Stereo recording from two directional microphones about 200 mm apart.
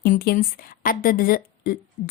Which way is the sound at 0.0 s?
50° left (ahead or behind).